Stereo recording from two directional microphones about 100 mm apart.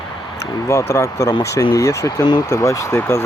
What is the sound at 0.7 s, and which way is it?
Speech, 25° left (ahead or behind).